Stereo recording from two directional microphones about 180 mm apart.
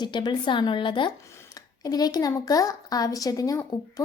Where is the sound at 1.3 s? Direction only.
15° left (ahead or behind).